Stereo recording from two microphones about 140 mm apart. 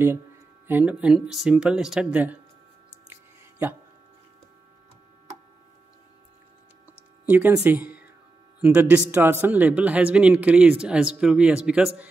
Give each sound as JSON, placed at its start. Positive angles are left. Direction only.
{"t": 0.7, "sound": "a man's voice", "side_deg": -10}
{"t": 3.1, "sound": "a sound", "side_deg": -15}
{"t": 7.2, "sound": "a man's voice", "side_deg": -15}